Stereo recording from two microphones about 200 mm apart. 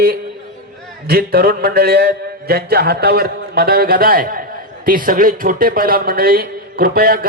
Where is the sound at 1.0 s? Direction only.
50° right (ahead or behind).